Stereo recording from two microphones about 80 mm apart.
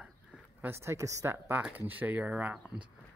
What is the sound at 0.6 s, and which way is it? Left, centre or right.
A man's voice, right.